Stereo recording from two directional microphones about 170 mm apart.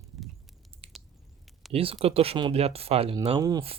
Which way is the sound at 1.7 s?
35° right (ahead or behind).